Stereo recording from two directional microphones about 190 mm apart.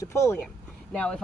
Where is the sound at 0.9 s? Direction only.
5° left (ahead or behind).